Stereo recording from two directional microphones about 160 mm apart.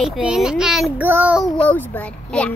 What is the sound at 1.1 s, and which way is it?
Child singing, 10° right (ahead or behind).